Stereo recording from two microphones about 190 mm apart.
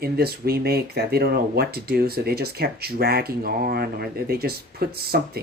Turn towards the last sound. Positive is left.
turn(degrees=-55)  # may be behind; listen again after turning